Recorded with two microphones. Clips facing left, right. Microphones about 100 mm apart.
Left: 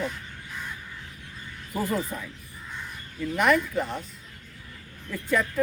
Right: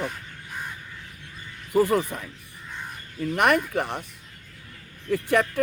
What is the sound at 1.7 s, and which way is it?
Speech, 65° right (ahead or behind).